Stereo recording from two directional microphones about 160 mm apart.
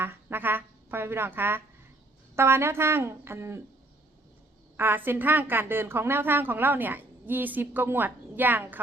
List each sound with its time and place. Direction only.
0.0 s a woman's voice: 15° right (ahead or behind)
4.8 s a woman's voice: 15° right (ahead or behind)